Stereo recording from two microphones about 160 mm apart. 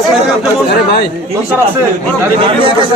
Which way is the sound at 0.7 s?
70° left (ahead or behind).